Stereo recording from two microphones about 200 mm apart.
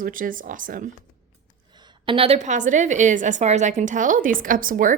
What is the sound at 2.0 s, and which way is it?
A woman's voice, 30° right (ahead or behind).